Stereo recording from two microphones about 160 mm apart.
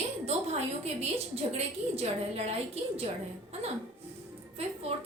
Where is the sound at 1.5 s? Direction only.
40° right (ahead or behind).